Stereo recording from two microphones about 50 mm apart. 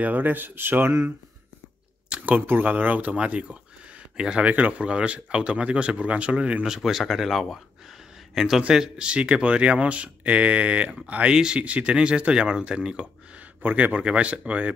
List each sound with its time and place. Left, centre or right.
0.0 s speech: right
2.1 s speech: right
2.4 s speech: right; by 4.5 s centre
4.5 s speech: right
6.7 s speech: centre
13.6 s speech: right
13.9 s speech: right